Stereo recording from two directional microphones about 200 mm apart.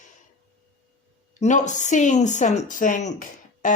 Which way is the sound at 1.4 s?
35° left (ahead or behind).